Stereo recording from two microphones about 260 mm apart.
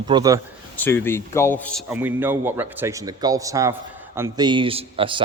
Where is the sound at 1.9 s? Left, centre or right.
Centre.